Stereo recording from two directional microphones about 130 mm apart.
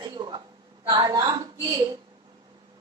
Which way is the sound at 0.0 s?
35° right (ahead or behind).